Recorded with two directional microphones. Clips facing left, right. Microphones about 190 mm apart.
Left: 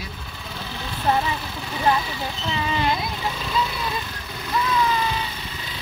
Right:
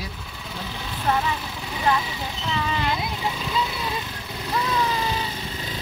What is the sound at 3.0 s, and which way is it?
Speech, 15° right (ahead or behind).